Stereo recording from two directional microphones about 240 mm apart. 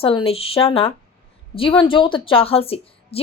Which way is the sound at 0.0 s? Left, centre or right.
Left.